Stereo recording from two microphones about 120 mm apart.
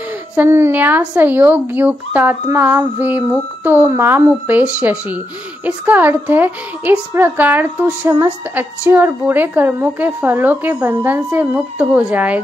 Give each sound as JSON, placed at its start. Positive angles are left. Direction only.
{"t": 0.4, "sound": "a woman's voice", "side_deg": -20}
{"t": 5.9, "sound": "a woman's voice", "side_deg": -15}